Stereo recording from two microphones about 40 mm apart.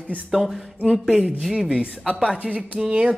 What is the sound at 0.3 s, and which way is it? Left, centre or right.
Speech, centre.